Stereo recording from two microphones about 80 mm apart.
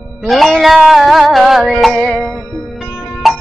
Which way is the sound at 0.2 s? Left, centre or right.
Centre.